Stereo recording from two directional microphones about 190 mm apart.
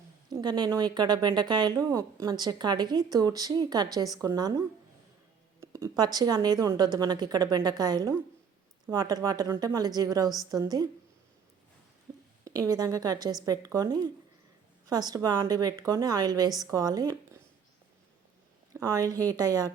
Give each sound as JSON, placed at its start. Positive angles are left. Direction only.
{"t": 0.3, "sound": "speech", "side_deg": -20}
{"t": 5.5, "sound": "a sound", "side_deg": -15}
{"t": 6.0, "sound": "speech", "side_deg": -20}
{"t": 10.2, "sound": "a woman's voice", "side_deg": 0}
{"t": 10.5, "sound": "speech", "side_deg": -20}
{"t": 12.5, "sound": "speech", "side_deg": -20}
{"t": 18.7, "sound": "speech", "side_deg": -15}